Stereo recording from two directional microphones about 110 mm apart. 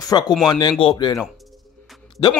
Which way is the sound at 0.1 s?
40° left (ahead or behind).